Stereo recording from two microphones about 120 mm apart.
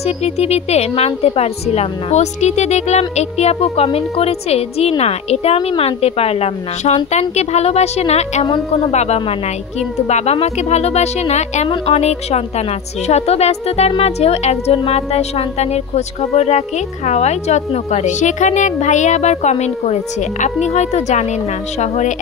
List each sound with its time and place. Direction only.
0.0 s a woman's voice: 60° left (ahead or behind); by 20.5 s 80° left
20.6 s speech: 70° left (ahead or behind)